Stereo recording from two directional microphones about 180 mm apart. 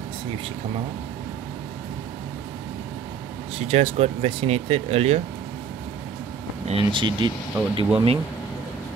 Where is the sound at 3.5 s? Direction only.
35° right (ahead or behind).